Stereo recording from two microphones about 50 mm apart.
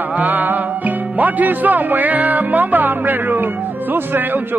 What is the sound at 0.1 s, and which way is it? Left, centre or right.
Speech, right.